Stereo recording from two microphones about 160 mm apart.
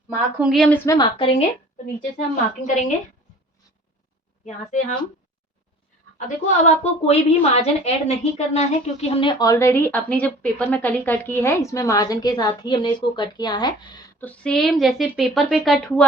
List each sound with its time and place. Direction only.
0.3 s speech: centre (ahead or behind)
0.7 s a woman's voice: 25° left (ahead or behind)
2.1 s a woman's voice: 50° left (ahead or behind)
4.4 s a woman's voice: 50° left (ahead or behind)
6.1 s a woman's voice: 45° left (ahead or behind); by 14.0 s 25° left (ahead or behind)
14.2 s speech: 10° left (ahead or behind)